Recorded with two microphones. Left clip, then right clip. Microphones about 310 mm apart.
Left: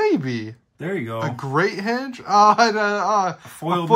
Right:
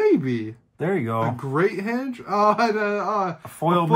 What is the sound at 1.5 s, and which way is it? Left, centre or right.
A man's voice, left.